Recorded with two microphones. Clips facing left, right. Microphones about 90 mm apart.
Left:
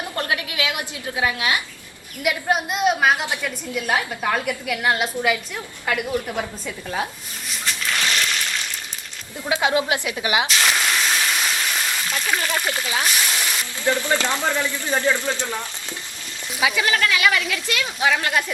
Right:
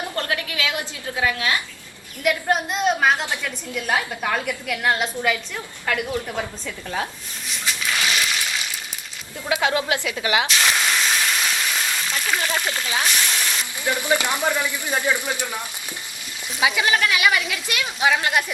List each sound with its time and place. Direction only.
0.2 s a woman's voice: 20° left (ahead or behind)
2.2 s a woman's voice: 5° left (ahead or behind)
7.4 s a sound: centre (ahead or behind)
9.5 s speech: 20° left (ahead or behind)
10.5 s a sound: centre (ahead or behind)
13.8 s speech: 15° right (ahead or behind)